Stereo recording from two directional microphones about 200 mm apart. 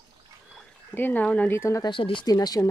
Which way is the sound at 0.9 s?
10° left (ahead or behind).